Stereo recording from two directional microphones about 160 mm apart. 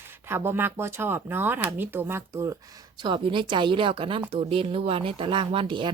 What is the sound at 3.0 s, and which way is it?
Speech, 30° right (ahead or behind).